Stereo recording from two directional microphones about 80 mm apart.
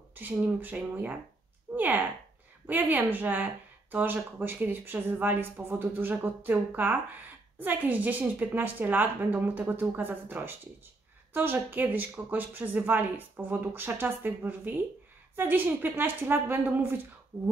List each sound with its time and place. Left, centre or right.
0.1 s speech: right